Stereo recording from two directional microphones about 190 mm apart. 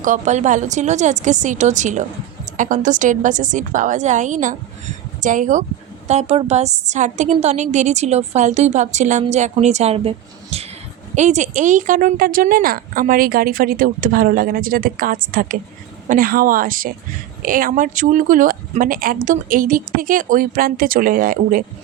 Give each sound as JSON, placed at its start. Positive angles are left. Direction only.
{"t": 0.0, "sound": "a woman's voice", "side_deg": -40}